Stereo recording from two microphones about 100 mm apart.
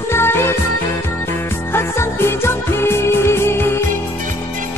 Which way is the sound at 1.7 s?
25° left (ahead or behind).